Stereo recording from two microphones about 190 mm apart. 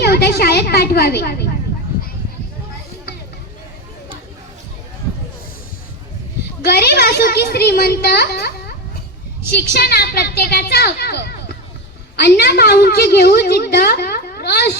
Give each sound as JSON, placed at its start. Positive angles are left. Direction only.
{"t": 0.0, "sound": "a woman's voice", "side_deg": 55}
{"t": 6.6, "sound": "a woman's voice", "side_deg": 60}